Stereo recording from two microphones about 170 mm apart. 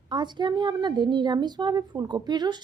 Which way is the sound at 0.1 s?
25° right (ahead or behind).